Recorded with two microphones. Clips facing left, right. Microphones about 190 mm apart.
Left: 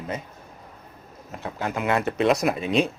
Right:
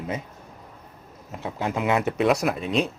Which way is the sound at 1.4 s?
25° right (ahead or behind).